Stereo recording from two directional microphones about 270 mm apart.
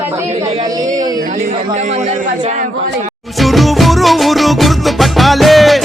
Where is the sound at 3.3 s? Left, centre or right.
Centre.